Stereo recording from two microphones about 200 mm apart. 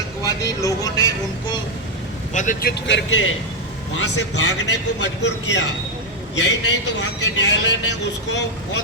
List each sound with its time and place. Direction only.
0.2 s speech: 15° left (ahead or behind)
2.3 s a man's voice: 40° left (ahead or behind); by 3.3 s 75° left (ahead or behind)
4.0 s a man's voice: 65° left (ahead or behind)